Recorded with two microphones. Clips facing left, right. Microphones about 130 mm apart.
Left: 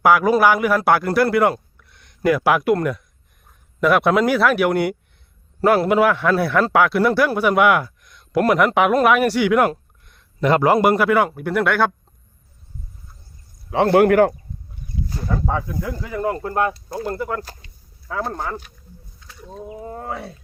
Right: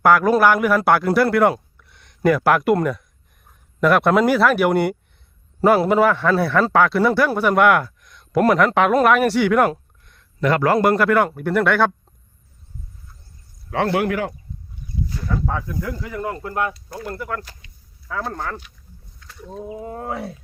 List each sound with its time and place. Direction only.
0.0 s a man's voice: 5° left (ahead or behind)
10.4 s a man's voice: 20° left (ahead or behind); by 11.9 s centre (ahead or behind)
13.7 s a man's voice: 25° left (ahead or behind)
13.9 s speech: 55° left (ahead or behind)
15.1 s speech: 35° left (ahead or behind)
15.4 s speech: 20° left (ahead or behind)
16.2 s speech: 30° left (ahead or behind)
17.4 s speech: 40° left (ahead or behind)
18.3 s speech: 10° left (ahead or behind)
19.3 s a sound: centre (ahead or behind)
19.8 s a man's voice: 5° right (ahead or behind)